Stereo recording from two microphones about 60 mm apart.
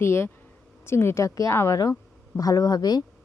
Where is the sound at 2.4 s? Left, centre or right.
Left.